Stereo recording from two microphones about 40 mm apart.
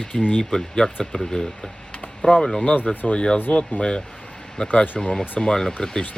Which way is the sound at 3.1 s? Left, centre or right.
Left.